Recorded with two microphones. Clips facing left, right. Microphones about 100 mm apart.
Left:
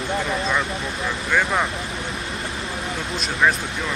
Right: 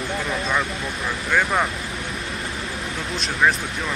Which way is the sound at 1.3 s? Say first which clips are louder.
Even; centre (ahead or behind).